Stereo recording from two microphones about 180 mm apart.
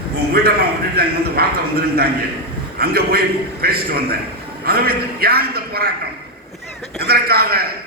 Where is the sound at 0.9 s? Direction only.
60° right (ahead or behind).